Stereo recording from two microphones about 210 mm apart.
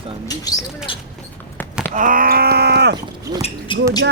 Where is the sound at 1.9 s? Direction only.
40° right (ahead or behind).